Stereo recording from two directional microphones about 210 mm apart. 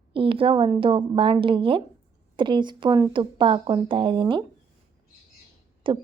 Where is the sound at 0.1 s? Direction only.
25° right (ahead or behind).